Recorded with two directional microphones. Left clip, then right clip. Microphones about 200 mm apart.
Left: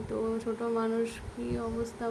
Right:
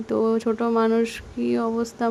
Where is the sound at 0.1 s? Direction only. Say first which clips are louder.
Right 11 dB; 45° right (ahead or behind).